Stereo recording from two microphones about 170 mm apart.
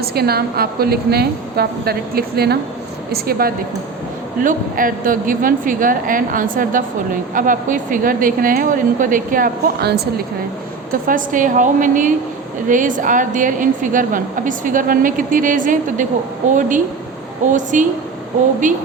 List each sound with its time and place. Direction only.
0.0 s a woman's voice: 65° right (ahead or behind)
11.0 s a woman's voice: 50° right (ahead or behind)